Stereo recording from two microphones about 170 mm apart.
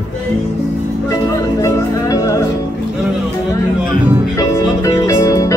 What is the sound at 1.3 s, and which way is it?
Music, 20° left (ahead or behind).